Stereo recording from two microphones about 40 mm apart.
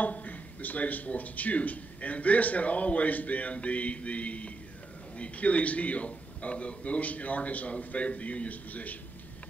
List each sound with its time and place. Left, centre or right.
0.0 s speech: left